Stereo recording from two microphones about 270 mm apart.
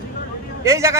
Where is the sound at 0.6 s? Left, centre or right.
Centre.